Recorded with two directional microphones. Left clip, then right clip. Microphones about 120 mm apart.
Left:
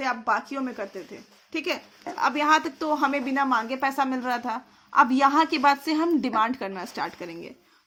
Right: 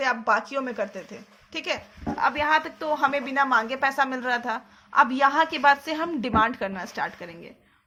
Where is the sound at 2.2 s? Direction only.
65° left (ahead or behind).